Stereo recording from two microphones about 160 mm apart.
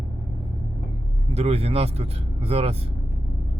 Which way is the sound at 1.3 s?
40° right (ahead or behind).